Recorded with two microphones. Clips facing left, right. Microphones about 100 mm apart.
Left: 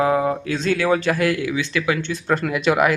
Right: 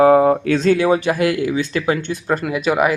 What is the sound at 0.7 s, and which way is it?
Speech, 15° right (ahead or behind).